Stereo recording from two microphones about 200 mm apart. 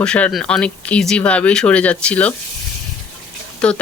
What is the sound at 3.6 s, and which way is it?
Speech, 5° left (ahead or behind).